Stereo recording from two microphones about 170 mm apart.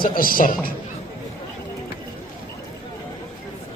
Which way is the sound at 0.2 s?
55° left (ahead or behind).